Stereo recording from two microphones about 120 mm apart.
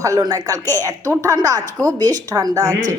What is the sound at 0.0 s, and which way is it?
A woman's voice, 30° right (ahead or behind).